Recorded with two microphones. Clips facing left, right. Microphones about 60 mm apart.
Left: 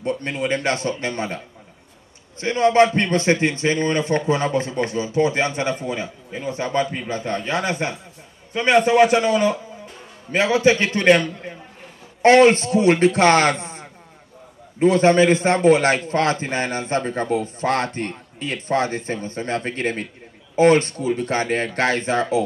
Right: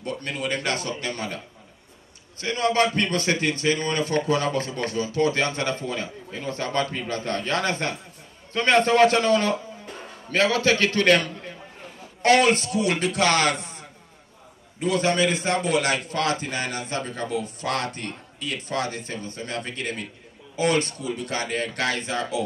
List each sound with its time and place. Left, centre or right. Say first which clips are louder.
0.0 s a man's voice: left 5 dB; left
2.4 s a man's voice: left 6 dB; left